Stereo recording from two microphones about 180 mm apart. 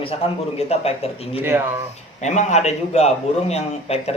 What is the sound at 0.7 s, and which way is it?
Speech, 35° left (ahead or behind).